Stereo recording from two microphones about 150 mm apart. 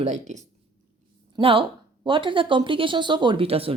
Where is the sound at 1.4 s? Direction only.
35° right (ahead or behind).